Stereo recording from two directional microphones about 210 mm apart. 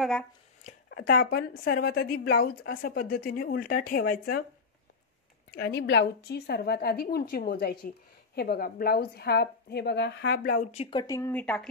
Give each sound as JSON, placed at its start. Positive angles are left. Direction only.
{"t": 0.0, "sound": "speech", "side_deg": 5}
{"t": 0.8, "sound": "a woman's voice", "side_deg": 50}
{"t": 2.1, "sound": "a woman's voice", "side_deg": 65}
{"t": 2.4, "sound": "a woman's voice", "side_deg": 45}
{"t": 5.8, "sound": "a woman's voice", "side_deg": 55}
{"t": 10.7, "sound": "speech", "side_deg": 25}